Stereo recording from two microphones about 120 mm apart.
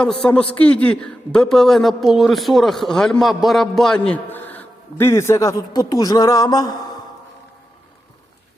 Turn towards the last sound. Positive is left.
turn(degrees=35)  # may be behind; listen again after turning